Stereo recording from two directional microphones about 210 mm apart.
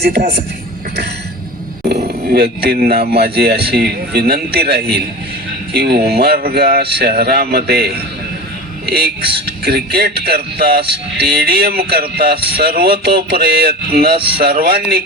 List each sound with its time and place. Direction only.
0.0 s speech: 50° right (ahead or behind)
2.0 s speech: 50° right (ahead or behind)